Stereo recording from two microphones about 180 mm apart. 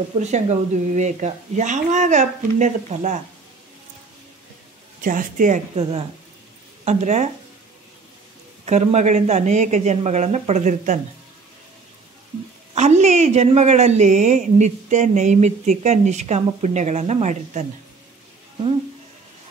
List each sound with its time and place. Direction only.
0.2 s a woman's voice: 40° right (ahead or behind)
5.0 s speech: 50° right (ahead or behind)
5.8 s a woman's voice: 30° right (ahead or behind)
8.6 s a woman's voice: 40° right (ahead or behind)
12.7 s a woman's voice: 40° right (ahead or behind)